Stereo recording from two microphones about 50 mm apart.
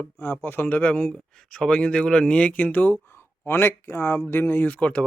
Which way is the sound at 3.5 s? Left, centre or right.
Left.